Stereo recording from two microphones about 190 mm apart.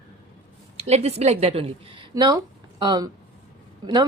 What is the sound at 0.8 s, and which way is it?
A woman's voice, 35° right (ahead or behind).